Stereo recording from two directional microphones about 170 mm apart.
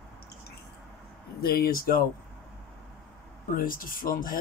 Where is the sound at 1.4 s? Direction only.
65° left (ahead or behind).